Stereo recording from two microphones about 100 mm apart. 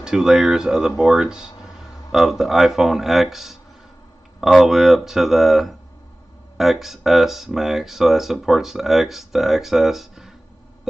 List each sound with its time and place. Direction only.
0.0 s speech: 5° right (ahead or behind)